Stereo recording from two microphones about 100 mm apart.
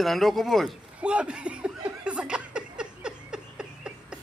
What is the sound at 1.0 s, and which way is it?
Chuckle, 10° right (ahead or behind).